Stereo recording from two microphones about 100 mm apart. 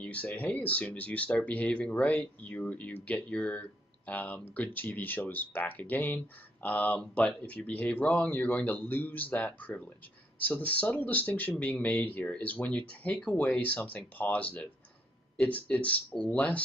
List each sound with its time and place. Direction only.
0.0 s speech: 15° left (ahead or behind)